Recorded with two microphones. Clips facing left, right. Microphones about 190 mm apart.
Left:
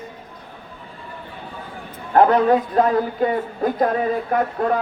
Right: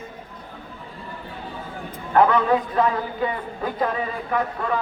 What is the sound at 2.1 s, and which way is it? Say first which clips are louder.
A man's voice: left 3 dB; 40° left (ahead or behind).